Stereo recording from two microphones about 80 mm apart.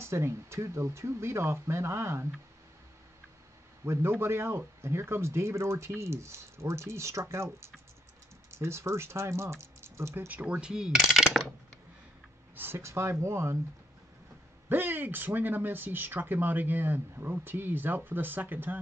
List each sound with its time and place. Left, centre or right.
0.0 s speech: right
3.8 s speech: right
10.2 s speech: centre
12.5 s speech: right
14.7 s speech: right